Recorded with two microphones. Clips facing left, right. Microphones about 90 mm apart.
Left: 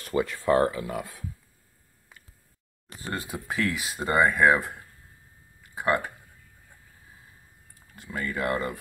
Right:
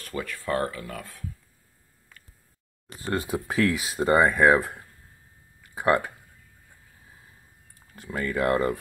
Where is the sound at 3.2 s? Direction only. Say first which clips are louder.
Right 4 dB; 35° right (ahead or behind).